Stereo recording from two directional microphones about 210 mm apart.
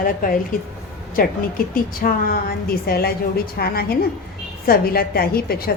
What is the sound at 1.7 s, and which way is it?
A woman's voice, 45° left (ahead or behind).